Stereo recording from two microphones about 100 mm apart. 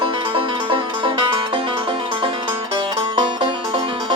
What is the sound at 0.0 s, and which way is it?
Music, 55° right (ahead or behind).